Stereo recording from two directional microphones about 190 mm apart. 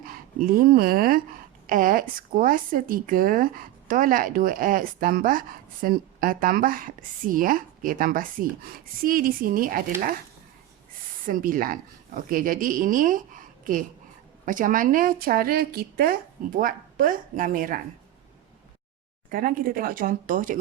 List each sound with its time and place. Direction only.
0.0 s speech: 50° right (ahead or behind)
11.3 s speech: 45° right (ahead or behind)
19.3 s speech: 50° right (ahead or behind)